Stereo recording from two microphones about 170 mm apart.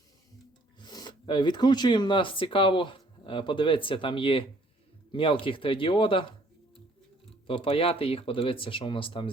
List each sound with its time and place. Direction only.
0.8 s speech: 25° left (ahead or behind)
7.4 s speech: 30° left (ahead or behind)